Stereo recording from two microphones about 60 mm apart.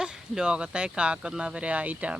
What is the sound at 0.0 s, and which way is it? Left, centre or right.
Speech, centre.